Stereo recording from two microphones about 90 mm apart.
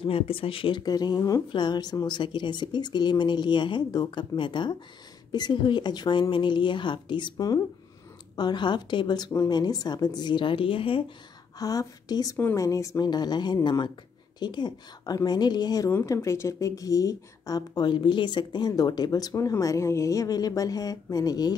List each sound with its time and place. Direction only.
0.0 s speech: 90° left; by 0.8 s 75° left (ahead or behind)
0.8 s a woman's voice: 50° left (ahead or behind); by 11.1 s 85° left
11.5 s a woman's voice: 40° left (ahead or behind)
13.0 s a woman's voice: 50° left (ahead or behind)
15.9 s speech: 30° left (ahead or behind); by 21.5 s 45° left (ahead or behind)